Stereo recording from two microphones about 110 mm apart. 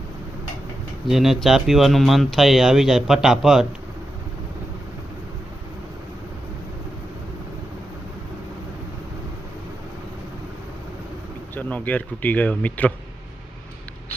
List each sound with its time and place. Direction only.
1.0 s speech: centre (ahead or behind)
11.5 s speech: 15° left (ahead or behind)